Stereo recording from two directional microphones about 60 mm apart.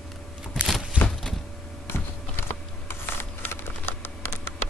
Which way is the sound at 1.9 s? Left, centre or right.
Left.